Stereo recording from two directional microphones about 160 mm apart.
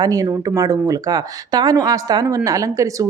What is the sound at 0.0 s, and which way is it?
Speech, 20° right (ahead or behind).